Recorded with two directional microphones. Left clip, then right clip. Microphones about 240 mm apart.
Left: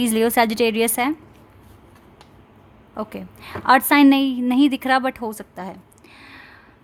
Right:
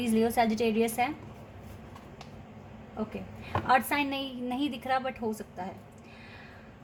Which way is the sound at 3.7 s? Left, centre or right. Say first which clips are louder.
Left 13 dB; left.